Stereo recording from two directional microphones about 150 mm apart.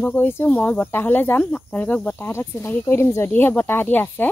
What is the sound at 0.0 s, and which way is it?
Speech, 15° left (ahead or behind).